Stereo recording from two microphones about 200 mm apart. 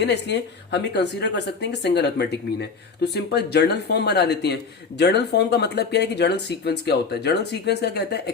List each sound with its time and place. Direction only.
0.0 s speech: 60° left (ahead or behind)